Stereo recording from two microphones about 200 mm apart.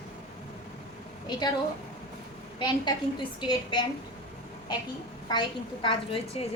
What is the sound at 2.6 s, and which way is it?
A woman's voice, 20° left (ahead or behind).